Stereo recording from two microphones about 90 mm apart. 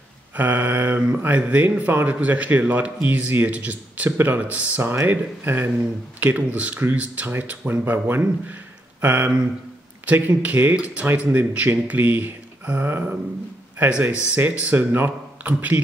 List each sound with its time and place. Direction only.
0.4 s speech: 20° right (ahead or behind)